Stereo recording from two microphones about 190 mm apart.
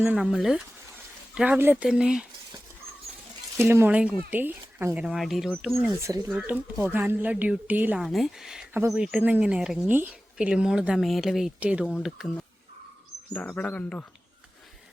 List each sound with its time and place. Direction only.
0.0 s speech: 5° right (ahead or behind)
3.6 s a woman's voice: 10° right (ahead or behind)
6.0 s a woman's voice: 15° right (ahead or behind); by 14.0 s 5° left (ahead or behind)